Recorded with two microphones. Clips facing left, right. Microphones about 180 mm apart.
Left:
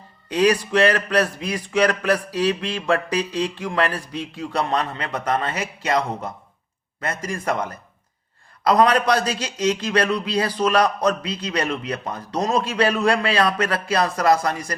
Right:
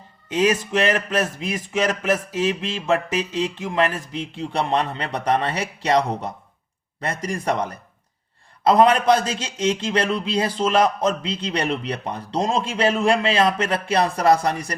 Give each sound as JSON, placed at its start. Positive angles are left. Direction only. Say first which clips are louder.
{"t": 0.3, "sound": "a man's voice", "louder": "left 2 dB", "side_deg": -20}